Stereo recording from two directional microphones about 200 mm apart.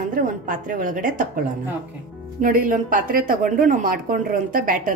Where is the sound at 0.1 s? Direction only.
45° right (ahead or behind).